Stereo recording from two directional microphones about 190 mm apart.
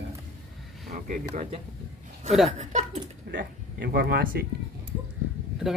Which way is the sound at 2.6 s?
40° right (ahead or behind).